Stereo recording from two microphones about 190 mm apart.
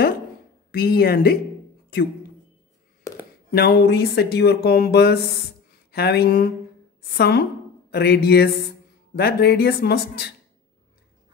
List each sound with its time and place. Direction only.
0.7 s speech: 50° left (ahead or behind)
3.1 s a sound: 15° left (ahead or behind)
3.5 s speech: 55° left (ahead or behind)